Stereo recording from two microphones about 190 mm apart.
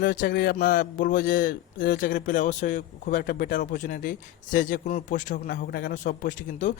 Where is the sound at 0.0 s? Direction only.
50° left (ahead or behind).